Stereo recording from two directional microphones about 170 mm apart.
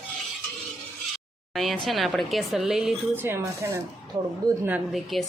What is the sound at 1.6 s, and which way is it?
Speech, centre (ahead or behind).